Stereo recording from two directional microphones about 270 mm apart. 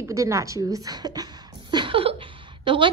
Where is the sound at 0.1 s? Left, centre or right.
Centre.